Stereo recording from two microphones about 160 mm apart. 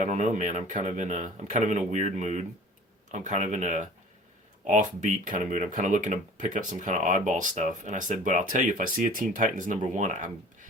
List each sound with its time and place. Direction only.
0.0 s speech: 45° right (ahead or behind)